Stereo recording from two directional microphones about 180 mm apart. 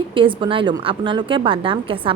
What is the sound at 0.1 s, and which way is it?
A woman's voice, 30° right (ahead or behind).